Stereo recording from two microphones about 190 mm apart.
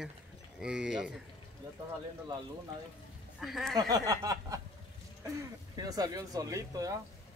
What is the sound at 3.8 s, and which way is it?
Speech, 20° right (ahead or behind).